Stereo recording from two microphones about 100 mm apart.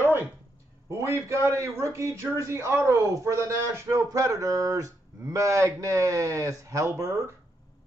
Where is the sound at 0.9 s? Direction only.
25° right (ahead or behind).